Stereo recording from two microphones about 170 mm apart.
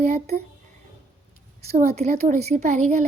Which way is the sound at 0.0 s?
40° right (ahead or behind).